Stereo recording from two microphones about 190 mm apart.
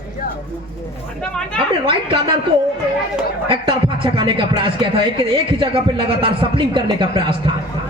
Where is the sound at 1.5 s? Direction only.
30° right (ahead or behind).